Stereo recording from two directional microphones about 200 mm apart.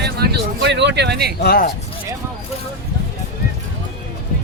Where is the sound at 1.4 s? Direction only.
50° left (ahead or behind).